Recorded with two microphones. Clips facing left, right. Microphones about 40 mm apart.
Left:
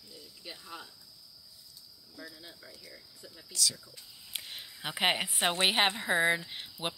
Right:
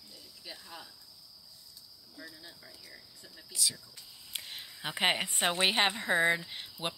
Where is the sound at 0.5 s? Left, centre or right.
Centre.